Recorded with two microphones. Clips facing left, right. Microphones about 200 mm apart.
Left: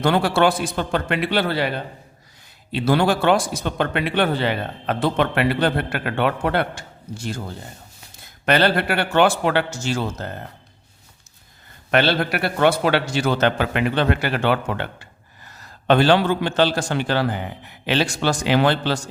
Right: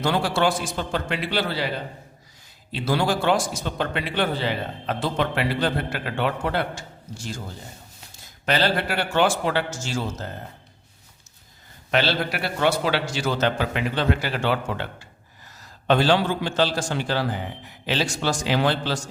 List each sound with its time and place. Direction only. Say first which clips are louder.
0.0 s a man's voice: left 4 dB; 60° left (ahead or behind)
11.9 s a man's voice: left 4 dB; 55° left (ahead or behind)